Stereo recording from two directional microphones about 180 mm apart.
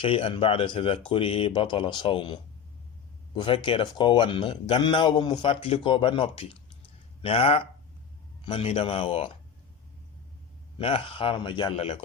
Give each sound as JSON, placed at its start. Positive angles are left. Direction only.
{"t": 0.0, "sound": "a man's voice", "side_deg": 30}
{"t": 10.8, "sound": "a man's voice", "side_deg": 30}